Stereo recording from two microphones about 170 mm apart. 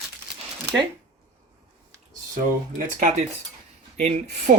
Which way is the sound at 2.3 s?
50° right (ahead or behind).